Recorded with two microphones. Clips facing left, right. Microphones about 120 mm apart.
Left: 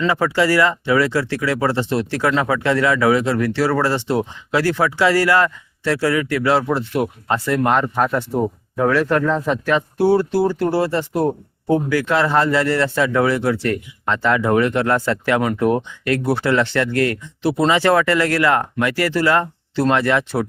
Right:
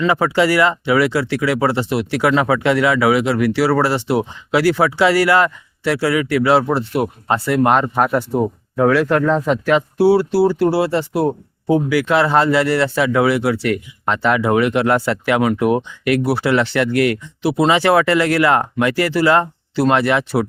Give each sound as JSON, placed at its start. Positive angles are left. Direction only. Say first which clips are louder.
{"t": 0.1, "sound": "speech", "louder": "right 2 dB", "side_deg": -15}
{"t": 8.3, "sound": "speech", "louder": "right 2 dB", "side_deg": -5}